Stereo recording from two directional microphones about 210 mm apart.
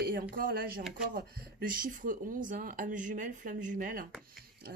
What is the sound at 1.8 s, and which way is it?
Speech, 40° right (ahead or behind).